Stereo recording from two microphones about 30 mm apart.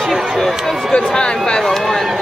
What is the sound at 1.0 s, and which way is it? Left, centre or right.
Speech, left.